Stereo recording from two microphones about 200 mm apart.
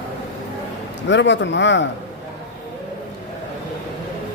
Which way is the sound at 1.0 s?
65° left (ahead or behind).